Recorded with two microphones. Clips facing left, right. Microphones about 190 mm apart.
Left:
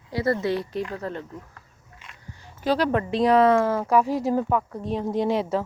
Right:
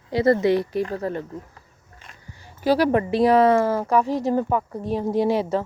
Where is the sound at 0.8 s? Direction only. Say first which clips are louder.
Right 5 dB; 35° right (ahead or behind).